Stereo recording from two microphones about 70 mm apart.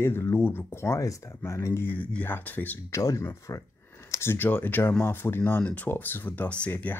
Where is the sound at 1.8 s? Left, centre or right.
Left.